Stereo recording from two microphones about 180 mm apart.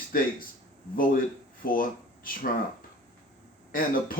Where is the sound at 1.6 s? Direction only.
50° left (ahead or behind).